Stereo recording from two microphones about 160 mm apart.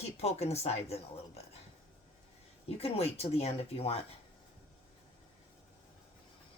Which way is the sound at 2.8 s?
40° left (ahead or behind).